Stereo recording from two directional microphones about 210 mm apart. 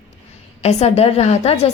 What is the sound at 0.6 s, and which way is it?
A woman's voice, 30° left (ahead or behind).